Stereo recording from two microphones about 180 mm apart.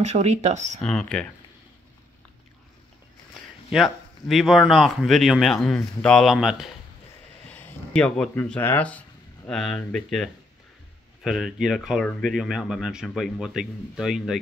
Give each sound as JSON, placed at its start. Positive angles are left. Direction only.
{"t": 0.0, "sound": "speech", "side_deg": -40}
{"t": 0.7, "sound": "speech", "side_deg": 0}
{"t": 3.7, "sound": "speech", "side_deg": 0}